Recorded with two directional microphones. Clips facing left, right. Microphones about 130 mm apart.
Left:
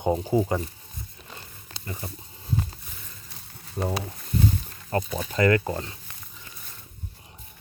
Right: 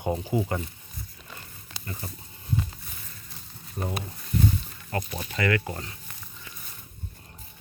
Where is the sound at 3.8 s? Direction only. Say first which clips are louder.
Left 4 dB; 30° left (ahead or behind).